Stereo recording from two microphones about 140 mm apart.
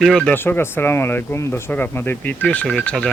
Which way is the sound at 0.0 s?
Centre (ahead or behind).